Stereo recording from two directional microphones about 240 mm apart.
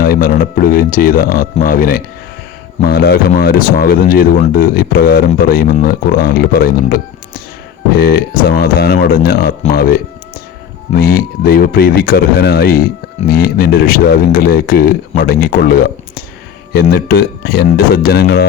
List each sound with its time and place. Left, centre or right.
0.0 s speech: left